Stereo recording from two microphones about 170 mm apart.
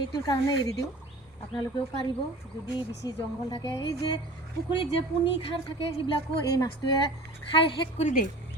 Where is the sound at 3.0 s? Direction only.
25° left (ahead or behind).